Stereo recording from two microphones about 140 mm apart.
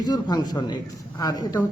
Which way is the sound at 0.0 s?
30° left (ahead or behind).